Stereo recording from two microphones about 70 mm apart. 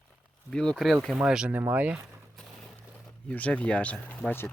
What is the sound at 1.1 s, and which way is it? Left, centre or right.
Speech, centre.